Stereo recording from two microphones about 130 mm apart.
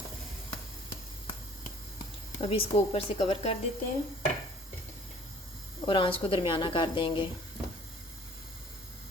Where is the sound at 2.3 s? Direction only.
45° left (ahead or behind).